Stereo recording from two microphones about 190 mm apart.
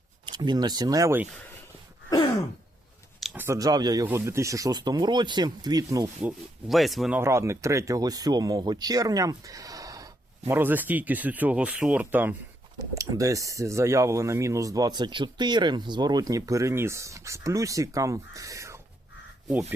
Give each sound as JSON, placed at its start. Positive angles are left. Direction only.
{"t": 0.3, "sound": "speech", "side_deg": -20}
{"t": 2.1, "sound": "throat clearing", "side_deg": 20}
{"t": 3.2, "sound": "a sound", "side_deg": 0}
{"t": 3.4, "sound": "speech", "side_deg": -15}
{"t": 6.2, "sound": "speech", "side_deg": 0}
{"t": 7.2, "sound": "speech", "side_deg": -15}